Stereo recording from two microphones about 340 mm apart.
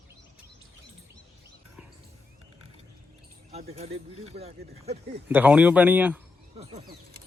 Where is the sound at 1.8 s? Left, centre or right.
Centre.